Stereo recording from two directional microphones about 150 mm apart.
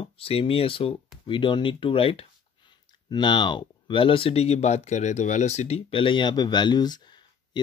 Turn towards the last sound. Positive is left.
turn(degrees=30)  # may be behind; listen again after turning